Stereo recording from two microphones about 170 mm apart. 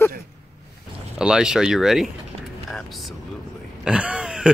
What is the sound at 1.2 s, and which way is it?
Speech, 5° right (ahead or behind).